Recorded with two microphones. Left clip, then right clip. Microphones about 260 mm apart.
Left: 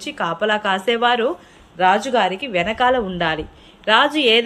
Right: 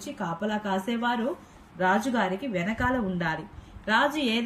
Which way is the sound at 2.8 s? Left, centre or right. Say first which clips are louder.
Left 12 dB; centre.